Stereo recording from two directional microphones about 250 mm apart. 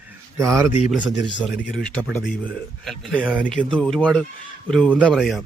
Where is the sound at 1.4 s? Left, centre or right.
Centre.